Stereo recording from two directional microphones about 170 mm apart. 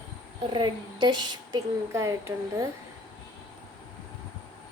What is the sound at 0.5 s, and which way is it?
A woman's voice, 25° right (ahead or behind).